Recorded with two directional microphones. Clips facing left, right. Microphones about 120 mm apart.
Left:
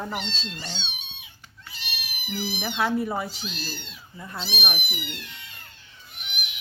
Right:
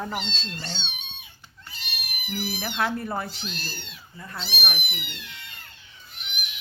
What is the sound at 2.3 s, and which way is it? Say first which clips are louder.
Speech: left 1 dB; 5° left (ahead or behind).